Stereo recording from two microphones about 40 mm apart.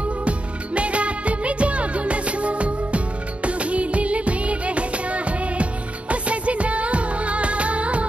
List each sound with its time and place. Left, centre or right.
0.2 s music: right
3.4 s music of bollywood: right